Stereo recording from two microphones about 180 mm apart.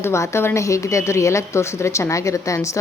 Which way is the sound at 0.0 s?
15° left (ahead or behind).